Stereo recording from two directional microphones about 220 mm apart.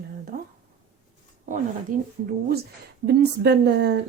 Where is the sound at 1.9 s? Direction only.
40° right (ahead or behind).